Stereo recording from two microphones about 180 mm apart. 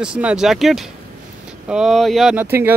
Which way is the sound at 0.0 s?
5° right (ahead or behind).